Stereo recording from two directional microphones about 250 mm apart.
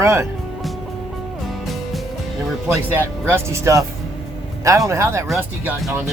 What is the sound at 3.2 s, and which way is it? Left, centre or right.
Speech, centre.